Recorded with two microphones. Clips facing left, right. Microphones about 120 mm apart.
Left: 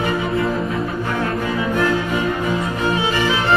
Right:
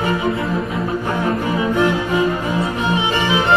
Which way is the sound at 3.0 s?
20° right (ahead or behind).